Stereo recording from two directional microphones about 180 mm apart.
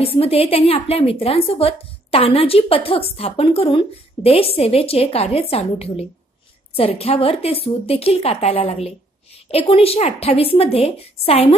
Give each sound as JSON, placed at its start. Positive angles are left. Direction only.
{"t": 0.0, "sound": "a woman's voice", "side_deg": 35}